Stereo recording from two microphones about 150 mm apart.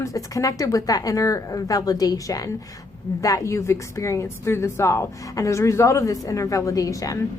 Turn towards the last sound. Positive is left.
turn(degrees=20)  # may be behind; listen again after turning